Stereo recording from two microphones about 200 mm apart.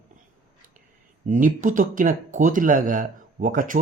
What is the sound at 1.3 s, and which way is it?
Speech, 40° right (ahead or behind).